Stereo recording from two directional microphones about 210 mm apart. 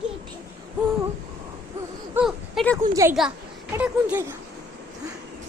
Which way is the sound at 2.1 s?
Centre (ahead or behind).